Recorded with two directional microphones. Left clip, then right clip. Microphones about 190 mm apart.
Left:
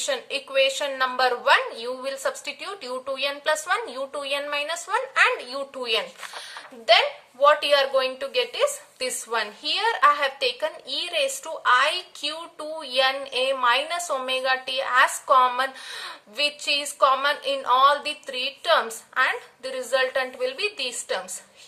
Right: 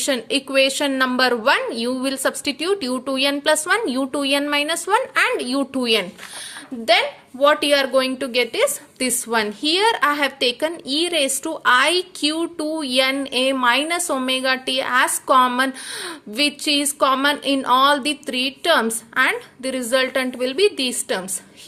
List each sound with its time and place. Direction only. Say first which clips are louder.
0.0 s a woman's voice: right 6 dB; 45° right (ahead or behind)